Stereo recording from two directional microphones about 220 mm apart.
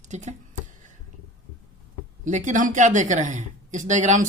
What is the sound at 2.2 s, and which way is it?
Speech, 35° right (ahead or behind).